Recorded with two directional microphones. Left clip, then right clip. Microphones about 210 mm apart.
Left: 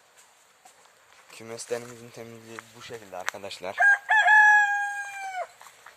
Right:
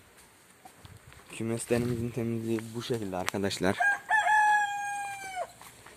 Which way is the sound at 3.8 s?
25° left (ahead or behind).